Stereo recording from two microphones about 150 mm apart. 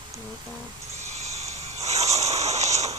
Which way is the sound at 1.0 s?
45° right (ahead or behind).